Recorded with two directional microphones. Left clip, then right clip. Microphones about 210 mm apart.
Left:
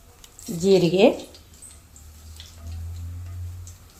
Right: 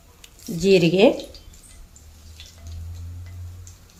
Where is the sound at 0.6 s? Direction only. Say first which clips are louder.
Right 1 dB; 10° right (ahead or behind).